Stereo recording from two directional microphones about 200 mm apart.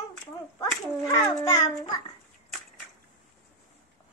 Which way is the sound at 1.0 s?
20° left (ahead or behind).